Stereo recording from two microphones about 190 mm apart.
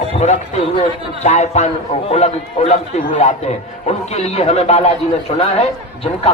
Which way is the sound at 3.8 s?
35° left (ahead or behind).